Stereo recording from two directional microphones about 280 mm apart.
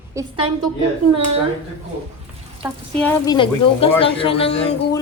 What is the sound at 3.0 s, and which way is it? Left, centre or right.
Speech, centre.